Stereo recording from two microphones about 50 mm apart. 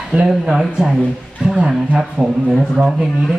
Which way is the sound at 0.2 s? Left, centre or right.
Centre.